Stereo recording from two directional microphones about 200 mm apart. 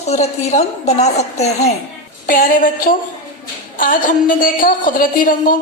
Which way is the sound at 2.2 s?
45° left (ahead or behind).